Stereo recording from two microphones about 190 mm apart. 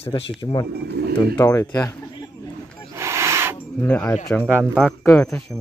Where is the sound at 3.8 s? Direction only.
10° left (ahead or behind).